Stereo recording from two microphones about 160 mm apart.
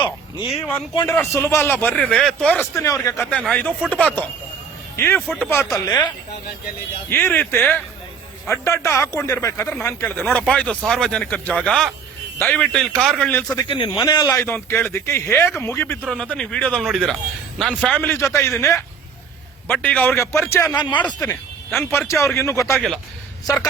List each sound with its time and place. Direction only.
0.0 s speech: 30° left (ahead or behind)
1.0 s a man's voice: 15° left (ahead or behind)
2.8 s a man's voice: 20° left (ahead or behind)
7.1 s a man's voice: 15° left (ahead or behind)
13.6 s a man's voice: 30° left (ahead or behind)
16.0 s a man's voice: 5° left (ahead or behind); by 22.7 s 20° left (ahead or behind)
22.7 s speech: centre (ahead or behind)